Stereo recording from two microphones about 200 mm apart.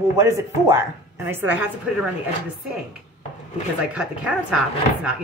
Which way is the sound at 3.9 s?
5° right (ahead or behind).